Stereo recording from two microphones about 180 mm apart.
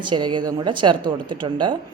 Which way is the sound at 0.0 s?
25° right (ahead or behind).